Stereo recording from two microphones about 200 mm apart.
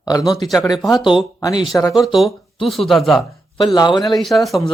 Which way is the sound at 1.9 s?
Centre (ahead or behind).